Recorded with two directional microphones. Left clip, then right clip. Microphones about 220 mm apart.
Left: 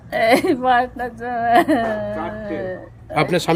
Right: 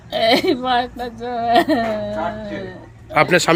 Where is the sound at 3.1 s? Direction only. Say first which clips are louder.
Right 4 dB; 5° left (ahead or behind).